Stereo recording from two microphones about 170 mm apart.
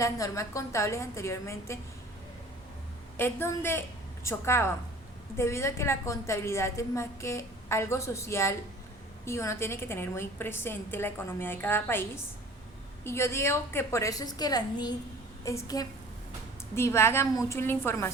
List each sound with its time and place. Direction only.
0.0 s a woman's voice: 20° left (ahead or behind)
3.2 s a woman's voice: 15° left (ahead or behind)
13.1 s a woman's voice: 15° left (ahead or behind)